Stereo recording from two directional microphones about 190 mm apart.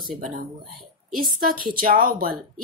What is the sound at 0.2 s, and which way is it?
A woman's voice, 45° right (ahead or behind).